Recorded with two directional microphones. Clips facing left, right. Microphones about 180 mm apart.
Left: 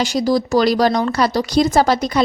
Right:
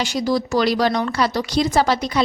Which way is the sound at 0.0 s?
40° left (ahead or behind).